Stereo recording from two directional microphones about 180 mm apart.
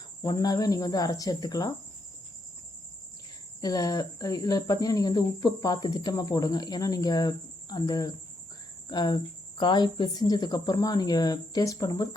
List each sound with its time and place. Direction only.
0.2 s speech: 20° left (ahead or behind)
3.6 s speech: 20° left (ahead or behind)